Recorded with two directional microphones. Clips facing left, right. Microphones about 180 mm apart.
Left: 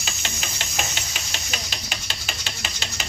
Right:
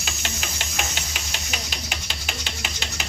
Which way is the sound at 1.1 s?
15° right (ahead or behind).